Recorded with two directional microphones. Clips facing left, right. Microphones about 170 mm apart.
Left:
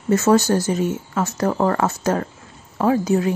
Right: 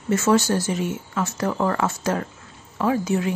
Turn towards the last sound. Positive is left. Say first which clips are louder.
# left 4 dB
turn(degrees=35)  # may be behind; listen again after turning